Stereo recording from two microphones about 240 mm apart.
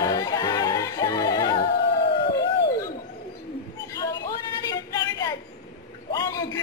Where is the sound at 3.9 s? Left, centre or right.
Centre.